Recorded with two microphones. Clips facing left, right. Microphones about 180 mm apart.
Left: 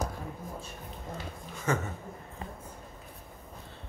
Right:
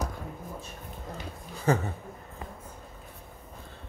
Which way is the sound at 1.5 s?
35° right (ahead or behind).